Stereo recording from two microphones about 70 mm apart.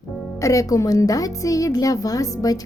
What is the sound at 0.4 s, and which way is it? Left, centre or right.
A woman's voice, left.